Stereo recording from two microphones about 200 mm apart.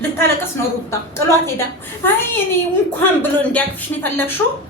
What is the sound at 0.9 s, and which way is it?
Speech, 15° left (ahead or behind).